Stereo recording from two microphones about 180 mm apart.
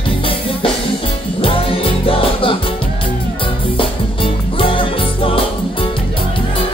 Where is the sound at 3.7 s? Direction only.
30° left (ahead or behind).